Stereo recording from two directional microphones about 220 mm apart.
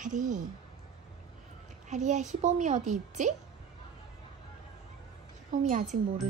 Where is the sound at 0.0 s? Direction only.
35° right (ahead or behind).